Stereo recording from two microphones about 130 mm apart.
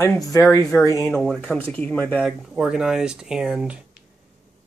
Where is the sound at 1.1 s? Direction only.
5° left (ahead or behind).